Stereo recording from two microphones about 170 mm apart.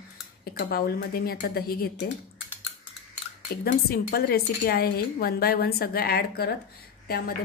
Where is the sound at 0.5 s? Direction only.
60° left (ahead or behind).